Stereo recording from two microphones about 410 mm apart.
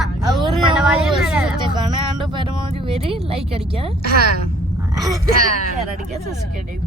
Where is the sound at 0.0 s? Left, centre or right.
Centre.